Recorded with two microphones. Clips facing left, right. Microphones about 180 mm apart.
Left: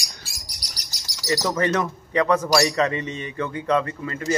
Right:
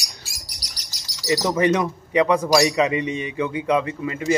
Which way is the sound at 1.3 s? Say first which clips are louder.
Right 3 dB; 15° right (ahead or behind).